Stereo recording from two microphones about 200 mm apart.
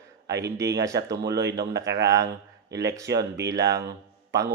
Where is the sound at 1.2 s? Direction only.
60° right (ahead or behind).